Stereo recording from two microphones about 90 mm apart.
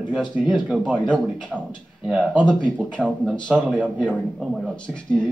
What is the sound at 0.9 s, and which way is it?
Speech, 15° left (ahead or behind).